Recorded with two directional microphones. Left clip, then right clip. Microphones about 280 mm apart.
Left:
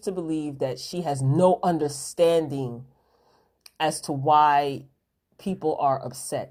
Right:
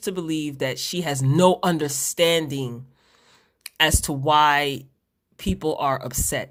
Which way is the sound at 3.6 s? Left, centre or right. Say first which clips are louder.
Right 5 dB; right.